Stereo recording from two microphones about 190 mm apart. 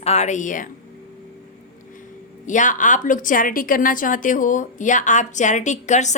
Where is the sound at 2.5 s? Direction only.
40° left (ahead or behind).